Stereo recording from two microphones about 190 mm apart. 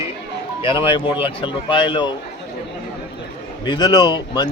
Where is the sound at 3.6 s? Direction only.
25° left (ahead or behind).